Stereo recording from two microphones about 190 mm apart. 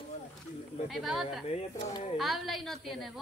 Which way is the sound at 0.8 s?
Centre (ahead or behind).